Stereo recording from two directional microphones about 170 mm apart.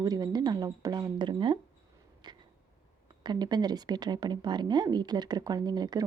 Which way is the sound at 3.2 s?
25° right (ahead or behind).